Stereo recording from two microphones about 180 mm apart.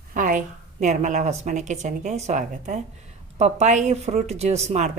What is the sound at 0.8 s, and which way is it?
A woman's voice, 40° right (ahead or behind).